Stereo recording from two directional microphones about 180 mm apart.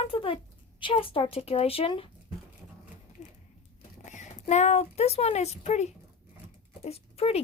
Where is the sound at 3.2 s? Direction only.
40° left (ahead or behind).